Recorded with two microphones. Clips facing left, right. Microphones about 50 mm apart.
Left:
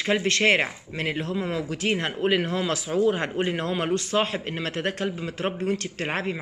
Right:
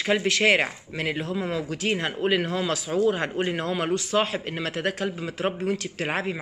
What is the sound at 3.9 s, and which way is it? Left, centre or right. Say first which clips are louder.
Speech: right 1 dB; left.